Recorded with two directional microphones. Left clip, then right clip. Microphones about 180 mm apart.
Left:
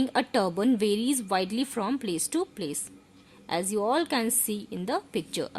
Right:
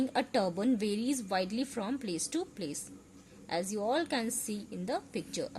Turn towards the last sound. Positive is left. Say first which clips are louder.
# left 6 dB
turn(degrees=50)  # may be behind; listen again after turning